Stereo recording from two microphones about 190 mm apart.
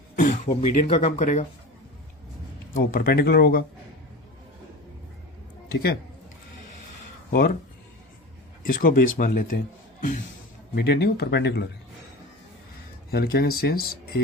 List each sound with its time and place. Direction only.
0.2 s throat clearing: 40° left (ahead or behind)
0.6 s speech: 30° left (ahead or behind)
2.7 s speech: 50° left (ahead or behind)
7.3 s speech: 50° left (ahead or behind)
8.6 s speech: 50° left (ahead or behind)
10.8 s speech: 60° left (ahead or behind)
13.1 s speech: 55° left (ahead or behind)